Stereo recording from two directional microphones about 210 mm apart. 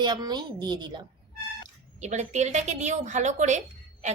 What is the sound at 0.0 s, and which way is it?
Speech, 20° right (ahead or behind).